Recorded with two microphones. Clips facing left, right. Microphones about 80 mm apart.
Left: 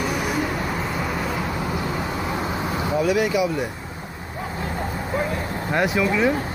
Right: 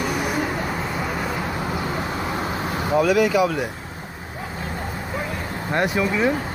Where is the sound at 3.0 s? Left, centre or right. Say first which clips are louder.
Right 3 dB; right.